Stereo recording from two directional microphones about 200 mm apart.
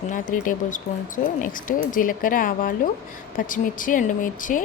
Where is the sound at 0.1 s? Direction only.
40° left (ahead or behind).